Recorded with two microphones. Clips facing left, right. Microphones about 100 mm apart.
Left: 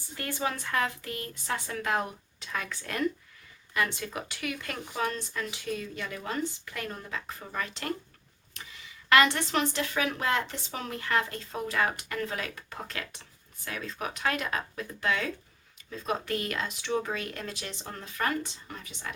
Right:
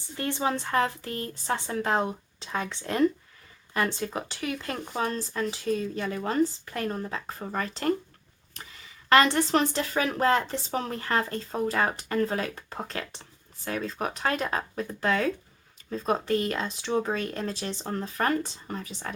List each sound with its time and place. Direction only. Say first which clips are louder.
0.2 s speech: right 5 dB; 25° right (ahead or behind)
8.6 s a sound: right 1 dB; 35° right (ahead or behind)
9.0 s speech: right 3 dB; 35° right (ahead or behind)